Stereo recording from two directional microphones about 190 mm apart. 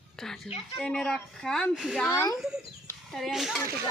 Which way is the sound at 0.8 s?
5° left (ahead or behind).